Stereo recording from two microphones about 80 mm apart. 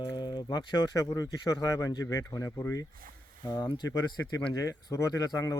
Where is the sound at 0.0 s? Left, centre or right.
Left.